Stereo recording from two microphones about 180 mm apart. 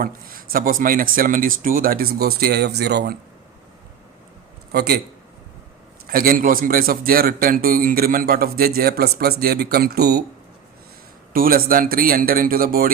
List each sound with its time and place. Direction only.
0.0 s speech: 55° right (ahead or behind)
4.7 s speech: 65° right (ahead or behind)
6.1 s a man's voice: 55° right (ahead or behind)
11.3 s speech: 50° right (ahead or behind)